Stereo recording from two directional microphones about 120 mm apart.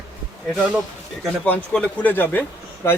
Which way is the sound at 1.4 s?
10° left (ahead or behind).